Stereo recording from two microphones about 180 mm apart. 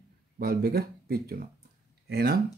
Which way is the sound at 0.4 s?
60° right (ahead or behind).